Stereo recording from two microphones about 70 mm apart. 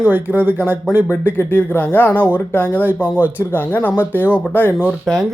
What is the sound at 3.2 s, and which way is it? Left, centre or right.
Speech, right.